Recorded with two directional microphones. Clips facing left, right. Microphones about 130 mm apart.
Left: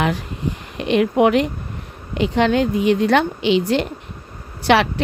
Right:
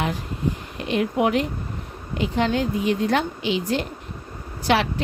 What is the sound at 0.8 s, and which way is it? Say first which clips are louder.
Speech: left 7 dB; 75° left (ahead or behind).